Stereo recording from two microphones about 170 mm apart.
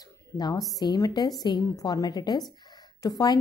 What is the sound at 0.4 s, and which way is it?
Speech, 25° left (ahead or behind).